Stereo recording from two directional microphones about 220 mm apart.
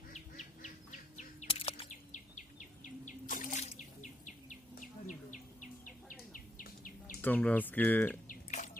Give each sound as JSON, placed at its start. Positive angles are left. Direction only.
{"t": 0.1, "sound": "chirp", "side_deg": 35}
{"t": 6.3, "sound": "insect", "side_deg": 40}
{"t": 7.2, "sound": "speech", "side_deg": 5}
{"t": 8.3, "sound": "a sound", "side_deg": 35}